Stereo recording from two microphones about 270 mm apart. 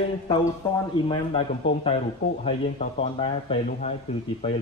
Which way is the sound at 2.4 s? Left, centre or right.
Left.